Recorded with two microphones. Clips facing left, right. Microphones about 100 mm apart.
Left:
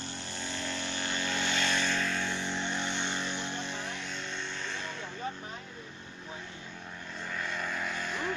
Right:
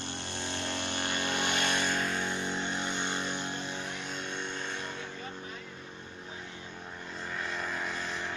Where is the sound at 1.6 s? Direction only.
15° right (ahead or behind).